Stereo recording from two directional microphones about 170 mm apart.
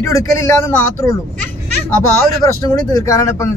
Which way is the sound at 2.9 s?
20° left (ahead or behind).